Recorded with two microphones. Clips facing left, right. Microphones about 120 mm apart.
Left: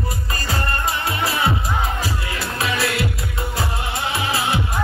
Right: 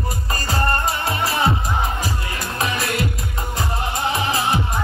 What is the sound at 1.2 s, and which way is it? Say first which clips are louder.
Music: right 1 dB; 40° right (ahead or behind).